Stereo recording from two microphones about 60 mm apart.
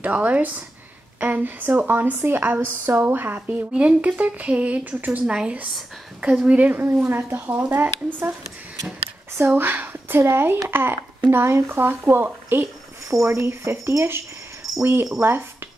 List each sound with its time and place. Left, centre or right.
0.0 s a woman's voice: right
5.2 s speech: centre; by 7.4 s right
7.4 s a woman's voice: right
9.6 s a woman's voice: right